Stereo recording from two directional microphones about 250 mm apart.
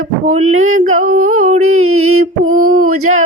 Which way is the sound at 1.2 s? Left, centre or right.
Right.